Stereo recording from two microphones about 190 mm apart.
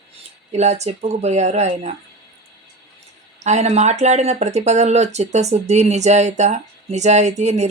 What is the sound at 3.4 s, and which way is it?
Speech, 35° right (ahead or behind).